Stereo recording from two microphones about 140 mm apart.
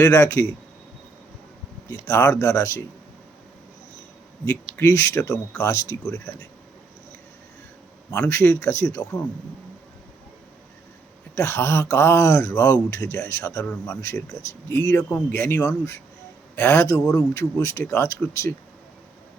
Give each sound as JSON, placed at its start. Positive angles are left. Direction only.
{"t": 0.0, "sound": "speech", "side_deg": 20}
{"t": 1.9, "sound": "speech", "side_deg": 20}
{"t": 4.8, "sound": "speech", "side_deg": 20}
{"t": 8.1, "sound": "speech", "side_deg": 15}
{"t": 11.3, "sound": "speech", "side_deg": 15}
{"t": 17.0, "sound": "a man's voice", "side_deg": 5}
{"t": 17.3, "sound": "speech", "side_deg": 20}